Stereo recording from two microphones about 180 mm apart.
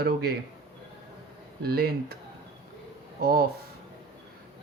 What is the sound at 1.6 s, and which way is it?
Speech, 55° right (ahead or behind).